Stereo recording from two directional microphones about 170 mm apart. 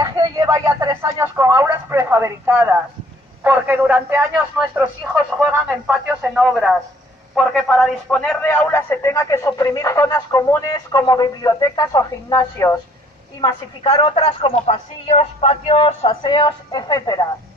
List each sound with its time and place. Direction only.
0.0 s a man's voice: 25° right (ahead or behind); by 12.7 s 20° left (ahead or behind)
13.4 s a woman's voice: 30° left (ahead or behind)